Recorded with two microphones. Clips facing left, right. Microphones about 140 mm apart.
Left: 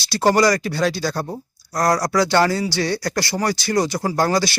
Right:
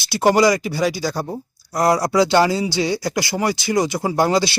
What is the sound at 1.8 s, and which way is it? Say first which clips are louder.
Speech: right 2 dB; 25° right (ahead or behind).